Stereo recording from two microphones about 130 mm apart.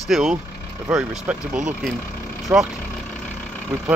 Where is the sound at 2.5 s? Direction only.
20° right (ahead or behind).